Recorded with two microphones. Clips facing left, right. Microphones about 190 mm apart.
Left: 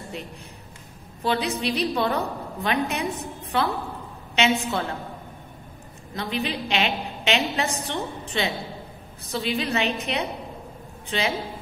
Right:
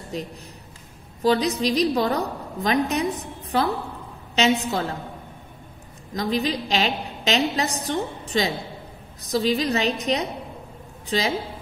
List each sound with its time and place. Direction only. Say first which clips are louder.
0.1 s a woman's voice: right 4 dB; 35° right (ahead or behind)
6.1 s a woman's voice: right 4 dB; 40° right (ahead or behind)